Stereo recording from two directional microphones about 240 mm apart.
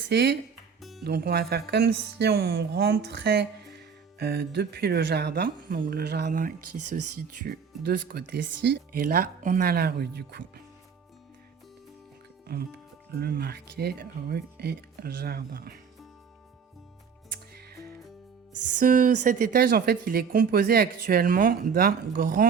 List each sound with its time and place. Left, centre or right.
0.1 s speech: right
0.8 s music: centre
1.0 s speech: right
6.6 s speech: right
7.2 s speech: right
12.5 s speech: right
17.3 s music: right
18.8 s speech: right